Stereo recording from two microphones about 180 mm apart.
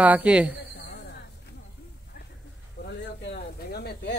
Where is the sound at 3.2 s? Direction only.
65° left (ahead or behind).